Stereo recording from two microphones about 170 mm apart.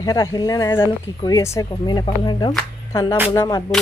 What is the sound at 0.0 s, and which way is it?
Speech, 25° left (ahead or behind).